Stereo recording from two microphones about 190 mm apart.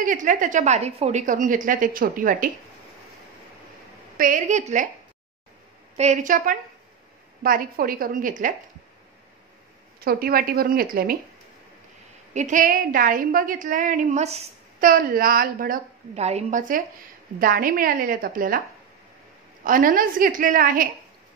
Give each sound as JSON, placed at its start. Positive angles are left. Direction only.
{"t": 0.0, "sound": "a woman's voice", "side_deg": -45}
{"t": 4.2, "sound": "a woman's voice", "side_deg": -40}
{"t": 5.9, "sound": "a woman's voice", "side_deg": -40}
{"t": 9.9, "sound": "a woman's voice", "side_deg": -50}
{"t": 12.4, "sound": "a woman's voice", "side_deg": -40}
{"t": 16.2, "sound": "a woman's voice", "side_deg": -35}
{"t": 19.6, "sound": "a woman's voice", "side_deg": -45}